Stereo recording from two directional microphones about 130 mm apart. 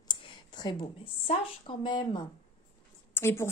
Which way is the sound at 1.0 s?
45° left (ahead or behind).